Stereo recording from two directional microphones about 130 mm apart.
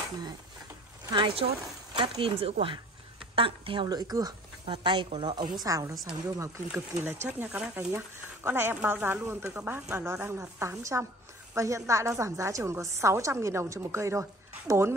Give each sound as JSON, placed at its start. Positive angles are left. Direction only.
{"t": 1.1, "sound": "a woman's voice", "side_deg": -35}
{"t": 5.6, "sound": "a woman's voice", "side_deg": -25}
{"t": 6.7, "sound": "a woman's voice", "side_deg": -15}